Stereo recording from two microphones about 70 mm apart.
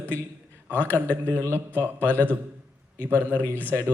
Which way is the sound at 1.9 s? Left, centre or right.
Left.